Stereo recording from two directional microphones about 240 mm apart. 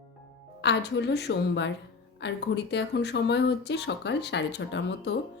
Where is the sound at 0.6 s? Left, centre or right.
Left.